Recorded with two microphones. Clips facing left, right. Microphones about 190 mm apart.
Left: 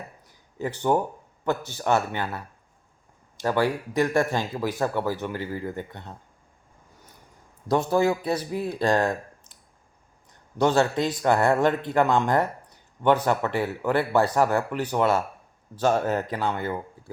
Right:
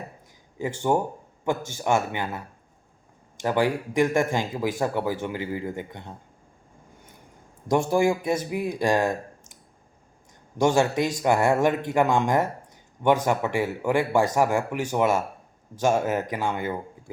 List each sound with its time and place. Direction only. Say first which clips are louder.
0.9 s speech: even; 15° right (ahead or behind)
3.4 s speech: right 1 dB; 15° right (ahead or behind)
7.9 s speech: even; 15° right (ahead or behind)
10.6 s speech: even; 15° right (ahead or behind)